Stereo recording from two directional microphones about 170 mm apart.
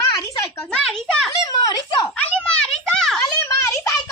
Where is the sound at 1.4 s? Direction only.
20° left (ahead or behind).